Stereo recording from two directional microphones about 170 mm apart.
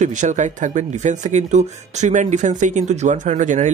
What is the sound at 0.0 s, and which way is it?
Speech, 45° right (ahead or behind).